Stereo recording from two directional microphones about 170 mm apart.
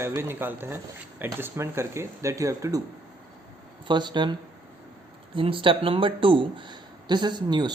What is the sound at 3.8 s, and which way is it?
Speech, 25° right (ahead or behind).